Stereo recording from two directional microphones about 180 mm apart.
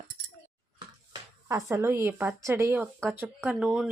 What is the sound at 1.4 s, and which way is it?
Speech, 15° right (ahead or behind).